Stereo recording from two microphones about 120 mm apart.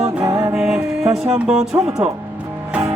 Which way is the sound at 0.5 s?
5° right (ahead or behind).